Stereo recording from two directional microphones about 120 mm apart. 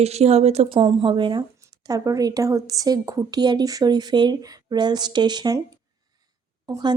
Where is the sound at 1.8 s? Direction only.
30° right (ahead or behind).